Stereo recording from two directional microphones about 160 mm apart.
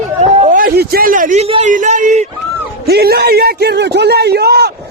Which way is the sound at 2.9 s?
80° right.